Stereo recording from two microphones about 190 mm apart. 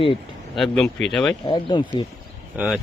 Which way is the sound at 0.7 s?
Centre (ahead or behind).